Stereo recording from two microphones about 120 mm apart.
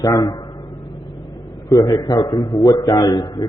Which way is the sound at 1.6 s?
30° left (ahead or behind).